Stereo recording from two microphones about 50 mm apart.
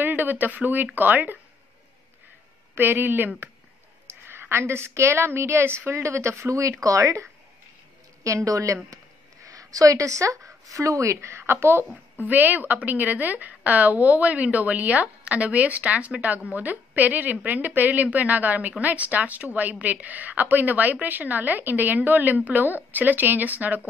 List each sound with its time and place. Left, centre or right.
0.0 s speech: right
2.8 s speech: right
4.3 s a woman's voice: right
5.9 s a woman's voice: right
9.9 s a woman's voice: right
12.2 s speech: right